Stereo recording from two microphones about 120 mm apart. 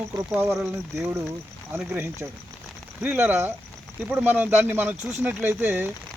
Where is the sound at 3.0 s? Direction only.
10° right (ahead or behind).